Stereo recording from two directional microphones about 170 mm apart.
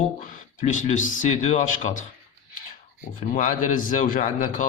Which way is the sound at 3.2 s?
45° left (ahead or behind).